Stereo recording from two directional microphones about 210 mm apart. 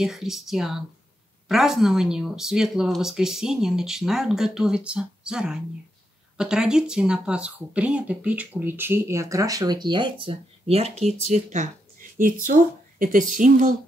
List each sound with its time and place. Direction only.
0.0 s speech: centre (ahead or behind); by 13.7 s 40° right (ahead or behind)